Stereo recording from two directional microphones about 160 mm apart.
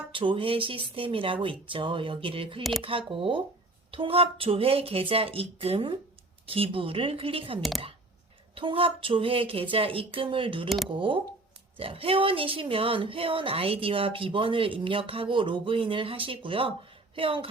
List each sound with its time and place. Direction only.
0.1 s speech: 30° right (ahead or behind)